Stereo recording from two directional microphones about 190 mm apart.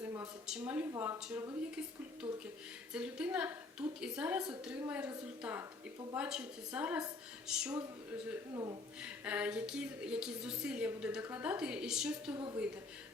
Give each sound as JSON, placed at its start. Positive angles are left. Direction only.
{"t": 0.4, "sound": "speech", "side_deg": -5}
{"t": 2.2, "sound": "speech", "side_deg": -20}
{"t": 2.9, "sound": "a woman's voice", "side_deg": -5}
{"t": 8.5, "sound": "speech", "side_deg": -20}
{"t": 9.0, "sound": "a woman's voice", "side_deg": -5}